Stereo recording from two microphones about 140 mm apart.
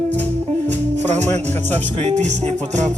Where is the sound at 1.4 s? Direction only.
15° left (ahead or behind).